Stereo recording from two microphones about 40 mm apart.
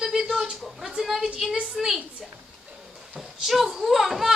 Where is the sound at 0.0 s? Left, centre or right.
Centre.